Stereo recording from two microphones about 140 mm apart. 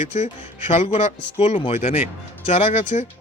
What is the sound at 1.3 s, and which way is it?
Speech, 40° left (ahead or behind).